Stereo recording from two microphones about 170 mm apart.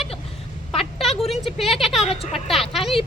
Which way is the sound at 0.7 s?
35° left (ahead or behind).